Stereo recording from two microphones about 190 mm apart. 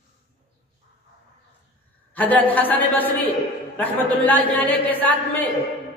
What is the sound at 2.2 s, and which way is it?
Speech, 10° left (ahead or behind).